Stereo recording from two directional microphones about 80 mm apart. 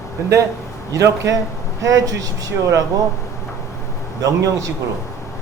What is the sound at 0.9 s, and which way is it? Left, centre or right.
A man's voice, right.